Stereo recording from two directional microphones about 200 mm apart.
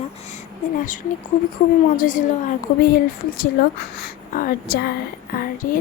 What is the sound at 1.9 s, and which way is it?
Speech, 40° left (ahead or behind).